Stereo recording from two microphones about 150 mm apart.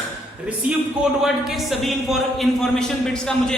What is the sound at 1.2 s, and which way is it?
A man's voice, centre (ahead or behind).